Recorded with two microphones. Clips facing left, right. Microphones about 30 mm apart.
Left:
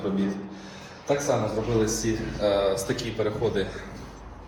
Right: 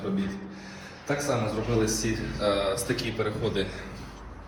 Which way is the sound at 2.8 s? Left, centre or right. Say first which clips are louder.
Left 1 dB; right.